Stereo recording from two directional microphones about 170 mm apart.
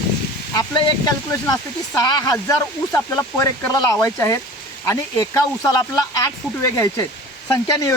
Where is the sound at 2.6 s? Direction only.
20° left (ahead or behind).